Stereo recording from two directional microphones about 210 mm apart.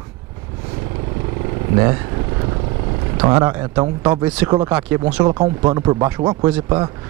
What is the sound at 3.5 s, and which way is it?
Speech, 10° right (ahead or behind).